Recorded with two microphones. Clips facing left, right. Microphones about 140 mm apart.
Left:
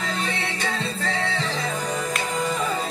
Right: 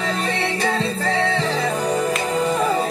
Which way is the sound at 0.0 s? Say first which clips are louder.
Right 5 dB; 35° right (ahead or behind).